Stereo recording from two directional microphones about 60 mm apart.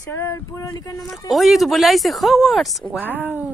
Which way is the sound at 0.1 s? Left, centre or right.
Left.